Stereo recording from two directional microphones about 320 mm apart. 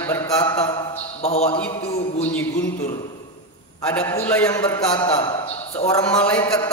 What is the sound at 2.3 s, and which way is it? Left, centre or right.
Speech, centre.